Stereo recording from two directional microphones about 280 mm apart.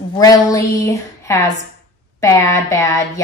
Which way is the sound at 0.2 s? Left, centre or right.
Centre.